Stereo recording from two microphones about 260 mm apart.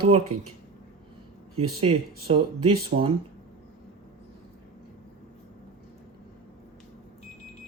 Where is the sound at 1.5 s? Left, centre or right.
Right.